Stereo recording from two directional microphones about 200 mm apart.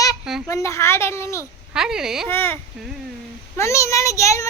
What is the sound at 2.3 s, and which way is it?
A child's voice, 10° left (ahead or behind).